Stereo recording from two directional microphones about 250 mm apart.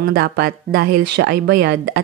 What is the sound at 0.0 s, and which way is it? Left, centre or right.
Speech, right.